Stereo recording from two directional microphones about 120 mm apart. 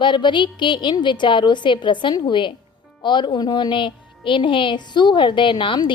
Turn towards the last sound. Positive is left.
turn(degrees=40)  # may be behind; listen again after turning